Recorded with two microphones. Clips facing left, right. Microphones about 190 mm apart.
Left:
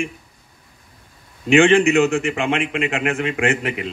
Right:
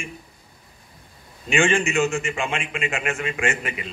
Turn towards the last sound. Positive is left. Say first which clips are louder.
# left 6 dB
turn(degrees=60)  # may be behind; listen again after turning